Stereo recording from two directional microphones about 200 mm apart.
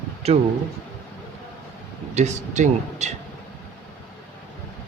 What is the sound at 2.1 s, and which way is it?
Speech, 35° right (ahead or behind).